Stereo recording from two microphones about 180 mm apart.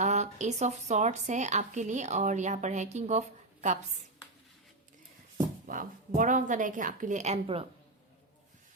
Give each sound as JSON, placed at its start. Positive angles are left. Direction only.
{"t": 0.0, "sound": "speech", "side_deg": -40}
{"t": 5.7, "sound": "a woman's voice", "side_deg": -50}